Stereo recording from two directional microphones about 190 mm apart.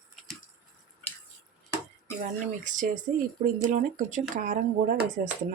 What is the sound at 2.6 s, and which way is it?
Speech, 40° right (ahead or behind).